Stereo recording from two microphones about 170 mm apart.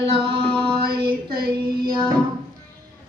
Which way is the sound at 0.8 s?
65° right (ahead or behind).